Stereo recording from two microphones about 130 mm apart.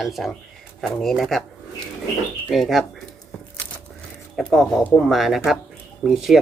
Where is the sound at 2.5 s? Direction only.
Centre (ahead or behind).